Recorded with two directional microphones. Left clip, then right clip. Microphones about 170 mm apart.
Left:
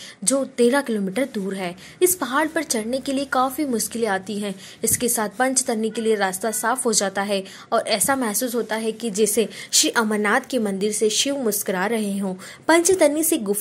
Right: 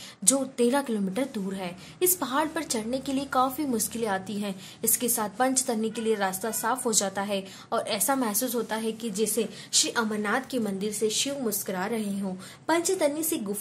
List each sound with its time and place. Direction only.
0.2 s a woman's voice: 15° left (ahead or behind)
9.2 s a woman's voice: 40° left (ahead or behind)